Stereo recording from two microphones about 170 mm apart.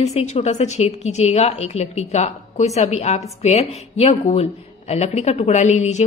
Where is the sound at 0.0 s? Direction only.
40° left (ahead or behind).